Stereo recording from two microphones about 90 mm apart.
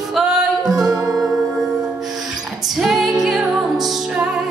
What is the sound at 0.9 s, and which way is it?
Music, 40° right (ahead or behind).